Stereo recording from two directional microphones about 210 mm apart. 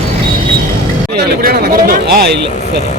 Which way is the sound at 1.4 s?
45° right (ahead or behind).